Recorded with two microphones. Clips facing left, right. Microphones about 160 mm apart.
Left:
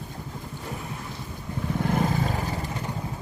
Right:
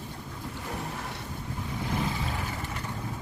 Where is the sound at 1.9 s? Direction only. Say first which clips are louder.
Left 6 dB; 45° left (ahead or behind).